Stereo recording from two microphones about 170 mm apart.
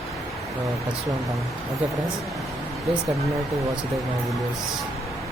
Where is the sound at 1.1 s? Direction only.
Centre (ahead or behind).